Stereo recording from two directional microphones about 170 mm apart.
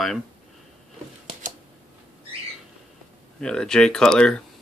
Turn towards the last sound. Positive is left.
turn(degrees=5)  # may be behind; listen again after turning